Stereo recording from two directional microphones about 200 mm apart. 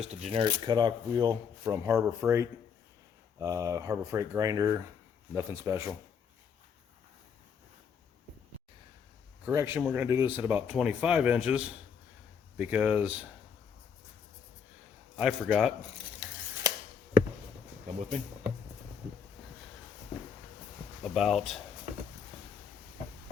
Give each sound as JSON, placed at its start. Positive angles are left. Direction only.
{"t": 0.0, "sound": "speech", "side_deg": -35}
{"t": 9.5, "sound": "speech", "side_deg": -10}
{"t": 15.2, "sound": "speech", "side_deg": 0}
{"t": 16.7, "sound": "a sound", "side_deg": -20}
{"t": 21.0, "sound": "speech", "side_deg": 0}